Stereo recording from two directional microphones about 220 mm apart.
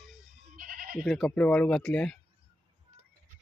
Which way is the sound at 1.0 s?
Centre (ahead or behind).